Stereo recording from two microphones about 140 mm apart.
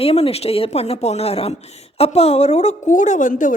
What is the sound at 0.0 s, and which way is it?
A woman's voice, 45° left (ahead or behind).